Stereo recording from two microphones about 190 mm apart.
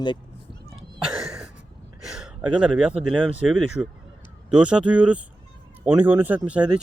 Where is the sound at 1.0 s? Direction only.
5° right (ahead or behind).